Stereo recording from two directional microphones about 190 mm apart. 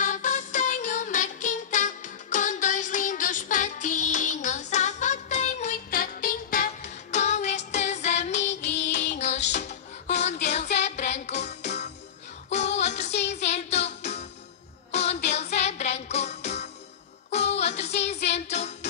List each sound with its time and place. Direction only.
0.0 s music: 40° left (ahead or behind)